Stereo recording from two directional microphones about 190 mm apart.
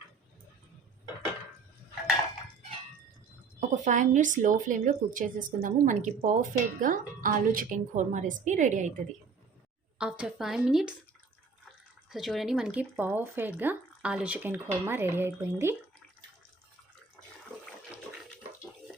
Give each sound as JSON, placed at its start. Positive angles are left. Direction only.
{"t": 3.8, "sound": "a woman's voice", "side_deg": -40}
{"t": 10.0, "sound": "a woman's voice", "side_deg": -5}
{"t": 12.1, "sound": "speech", "side_deg": 0}